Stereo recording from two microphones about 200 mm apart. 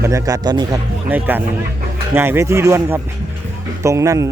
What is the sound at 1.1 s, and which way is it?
Speech, 10° right (ahead or behind).